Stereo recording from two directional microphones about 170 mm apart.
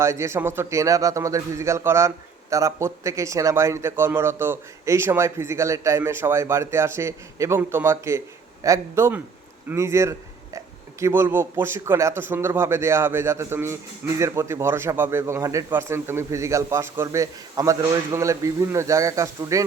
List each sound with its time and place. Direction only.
0.0 s a man's voice: 15° right (ahead or behind)